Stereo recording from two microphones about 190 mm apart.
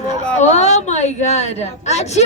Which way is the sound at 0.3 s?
35° left (ahead or behind).